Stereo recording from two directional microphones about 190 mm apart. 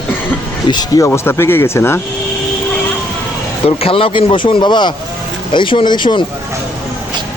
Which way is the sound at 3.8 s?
30° left (ahead or behind).